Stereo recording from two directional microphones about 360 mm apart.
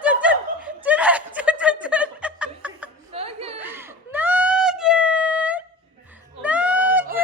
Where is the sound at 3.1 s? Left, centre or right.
Centre.